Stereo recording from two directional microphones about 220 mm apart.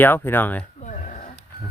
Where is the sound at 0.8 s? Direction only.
35° left (ahead or behind).